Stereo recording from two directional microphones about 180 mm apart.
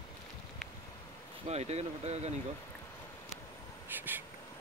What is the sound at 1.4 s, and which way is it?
Speech, 35° right (ahead or behind).